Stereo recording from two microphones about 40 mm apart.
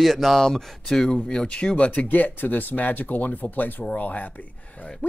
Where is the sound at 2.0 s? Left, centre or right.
Left.